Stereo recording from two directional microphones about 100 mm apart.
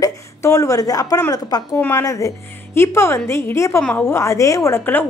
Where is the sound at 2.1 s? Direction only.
35° left (ahead or behind).